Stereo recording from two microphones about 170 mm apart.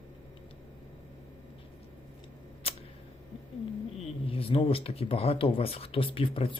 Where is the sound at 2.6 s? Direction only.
35° left (ahead or behind).